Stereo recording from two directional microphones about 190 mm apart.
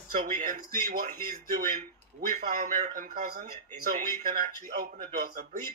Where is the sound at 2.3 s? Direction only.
40° right (ahead or behind).